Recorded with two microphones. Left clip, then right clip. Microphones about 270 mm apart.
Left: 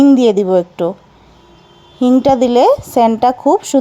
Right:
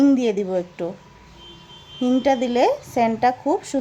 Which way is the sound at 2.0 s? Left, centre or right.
Left.